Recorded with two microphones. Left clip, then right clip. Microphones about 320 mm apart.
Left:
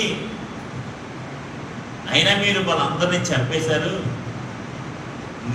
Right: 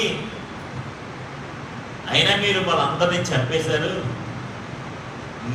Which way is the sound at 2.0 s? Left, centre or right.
Centre.